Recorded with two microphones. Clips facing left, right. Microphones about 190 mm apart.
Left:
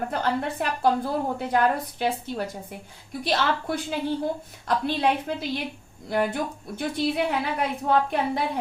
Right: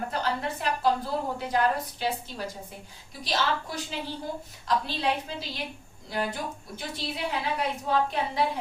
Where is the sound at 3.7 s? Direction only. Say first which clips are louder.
Left 7 dB; 60° left (ahead or behind).